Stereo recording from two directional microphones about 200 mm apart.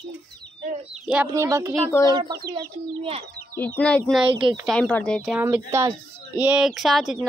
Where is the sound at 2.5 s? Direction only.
25° right (ahead or behind).